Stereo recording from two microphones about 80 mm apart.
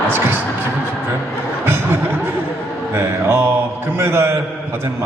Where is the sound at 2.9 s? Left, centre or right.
Right.